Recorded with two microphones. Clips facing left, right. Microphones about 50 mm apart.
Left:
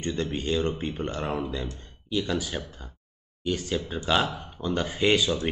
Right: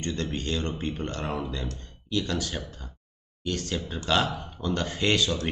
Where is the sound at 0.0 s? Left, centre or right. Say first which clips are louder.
Left 2 dB; centre.